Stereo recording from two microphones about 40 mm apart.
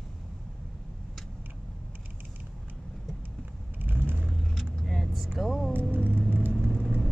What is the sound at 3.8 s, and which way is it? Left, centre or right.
Vehicle, right.